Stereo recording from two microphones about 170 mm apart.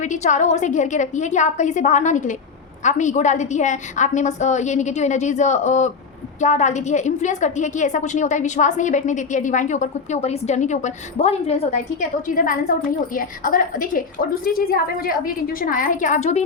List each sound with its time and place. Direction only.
0.0 s a woman's voice: 45° left (ahead or behind)